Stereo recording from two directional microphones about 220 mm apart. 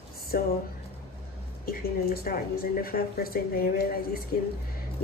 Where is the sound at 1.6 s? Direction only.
40° left (ahead or behind).